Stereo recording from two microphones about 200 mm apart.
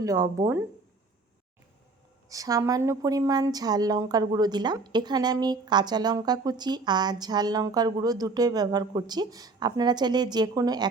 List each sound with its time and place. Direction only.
0.0 s speech: 15° right (ahead or behind)
2.3 s a woman's voice: 15° right (ahead or behind)